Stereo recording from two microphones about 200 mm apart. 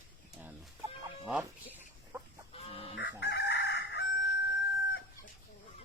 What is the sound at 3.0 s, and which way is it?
Chicken, 60° left (ahead or behind).